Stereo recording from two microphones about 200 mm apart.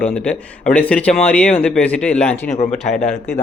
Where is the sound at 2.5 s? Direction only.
35° left (ahead or behind).